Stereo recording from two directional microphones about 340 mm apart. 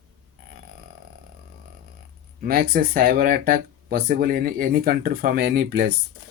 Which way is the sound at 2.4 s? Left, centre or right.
Right.